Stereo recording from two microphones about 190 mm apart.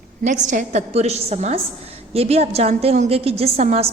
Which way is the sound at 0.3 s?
40° right (ahead or behind).